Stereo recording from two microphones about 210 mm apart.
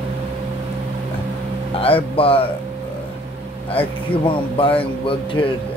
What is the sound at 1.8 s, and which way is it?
Speech, 25° left (ahead or behind).